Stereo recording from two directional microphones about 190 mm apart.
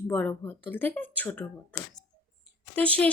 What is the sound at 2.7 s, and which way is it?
Speech, 5° left (ahead or behind).